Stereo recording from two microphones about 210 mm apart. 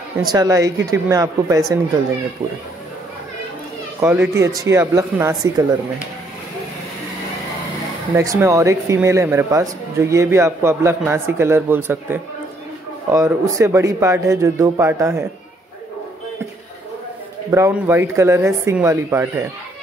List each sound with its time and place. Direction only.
0.2 s speech: 20° right (ahead or behind)
4.0 s speech: 10° right (ahead or behind)
8.2 s speech: 15° right (ahead or behind)
17.5 s speech: 15° right (ahead or behind)